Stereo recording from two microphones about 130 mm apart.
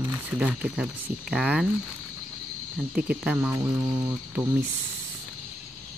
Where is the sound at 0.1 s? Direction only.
10° right (ahead or behind).